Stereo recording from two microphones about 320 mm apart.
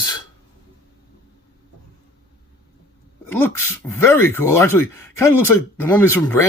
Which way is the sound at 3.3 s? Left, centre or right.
Centre.